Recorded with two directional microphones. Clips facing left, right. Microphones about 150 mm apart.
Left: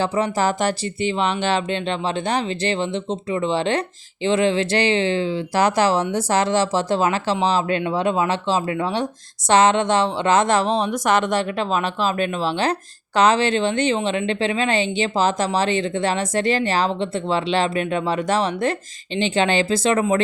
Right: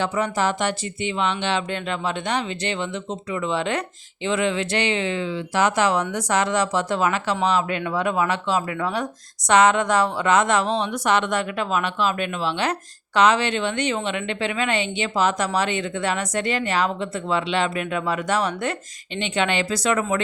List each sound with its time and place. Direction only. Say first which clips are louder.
0.0 s speech: left 2 dB; 35° left (ahead or behind)